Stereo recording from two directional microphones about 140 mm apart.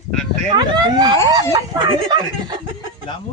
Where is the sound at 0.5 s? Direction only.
30° right (ahead or behind).